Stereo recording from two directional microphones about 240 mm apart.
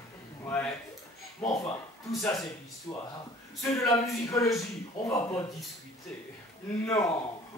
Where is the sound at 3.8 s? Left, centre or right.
Centre.